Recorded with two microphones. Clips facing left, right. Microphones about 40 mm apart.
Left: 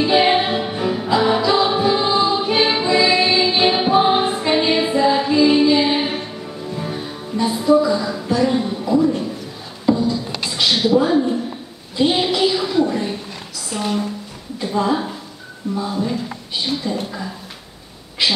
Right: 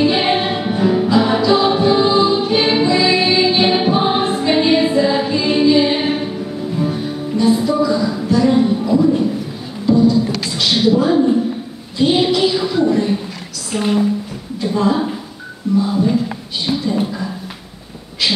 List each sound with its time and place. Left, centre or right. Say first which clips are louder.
0.0 s music: even; centre
1.4 s choir: right 3 dB; centre
6.8 s music: right 9 dB; centre
8.5 s music: right 6 dB; centre
8.8 s music: right 2 dB; centre
9.9 s beatboxing: right 8 dB; centre
12.0 s a sound: right 3 dB; centre
13.7 s a sound: right 5 dB; centre
14.6 s a sound: right 3 dB; centre